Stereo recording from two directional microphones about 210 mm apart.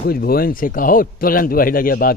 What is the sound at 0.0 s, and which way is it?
Speech, 45° left (ahead or behind).